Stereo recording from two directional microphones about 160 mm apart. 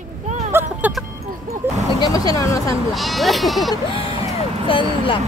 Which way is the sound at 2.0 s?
25° left (ahead or behind).